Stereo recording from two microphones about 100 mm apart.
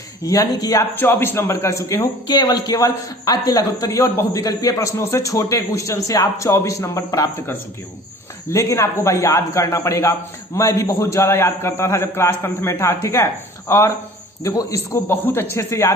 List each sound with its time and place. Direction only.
0.2 s a man's voice: 35° left (ahead or behind)
0.9 s a man's voice: 20° left (ahead or behind)
2.2 s a man's voice: 45° left (ahead or behind)
8.4 s a man's voice: 30° left (ahead or behind)